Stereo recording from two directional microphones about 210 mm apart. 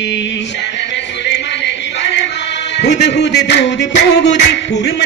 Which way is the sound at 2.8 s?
55° left (ahead or behind).